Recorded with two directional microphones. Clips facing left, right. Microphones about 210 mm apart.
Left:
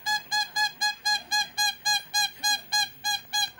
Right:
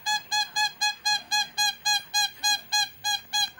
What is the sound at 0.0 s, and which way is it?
Music, 20° left (ahead or behind).